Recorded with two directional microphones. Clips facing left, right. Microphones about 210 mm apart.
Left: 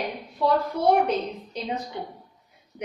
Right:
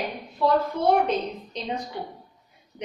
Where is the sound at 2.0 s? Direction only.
20° left (ahead or behind).